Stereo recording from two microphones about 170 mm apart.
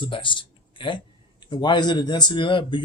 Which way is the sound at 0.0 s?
30° left (ahead or behind).